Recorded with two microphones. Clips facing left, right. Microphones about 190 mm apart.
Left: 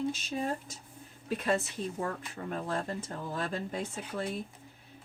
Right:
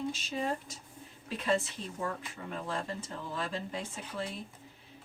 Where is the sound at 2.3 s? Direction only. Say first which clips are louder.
Left 3 dB; 45° left (ahead or behind).